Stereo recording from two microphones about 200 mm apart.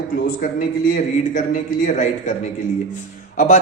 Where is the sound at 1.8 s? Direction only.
40° left (ahead or behind).